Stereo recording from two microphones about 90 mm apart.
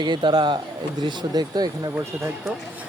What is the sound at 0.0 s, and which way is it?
A man's voice, 55° right (ahead or behind).